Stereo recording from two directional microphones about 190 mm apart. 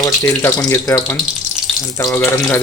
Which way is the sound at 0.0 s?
15° left (ahead or behind).